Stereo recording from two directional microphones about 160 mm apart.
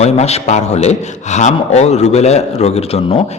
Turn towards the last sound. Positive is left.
turn(degrees=40)  # may be behind; listen again after turning